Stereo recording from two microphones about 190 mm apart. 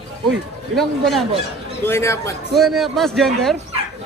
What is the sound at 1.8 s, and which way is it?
Speech, 15° left (ahead or behind).